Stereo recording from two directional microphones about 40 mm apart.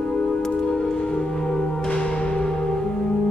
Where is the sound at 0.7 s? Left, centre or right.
Centre.